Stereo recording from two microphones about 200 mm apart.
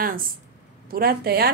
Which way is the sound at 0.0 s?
45° right (ahead or behind).